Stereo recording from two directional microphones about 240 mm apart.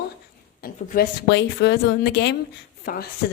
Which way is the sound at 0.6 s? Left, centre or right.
Left.